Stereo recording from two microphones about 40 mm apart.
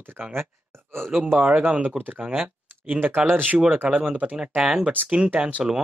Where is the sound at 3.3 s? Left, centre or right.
Right.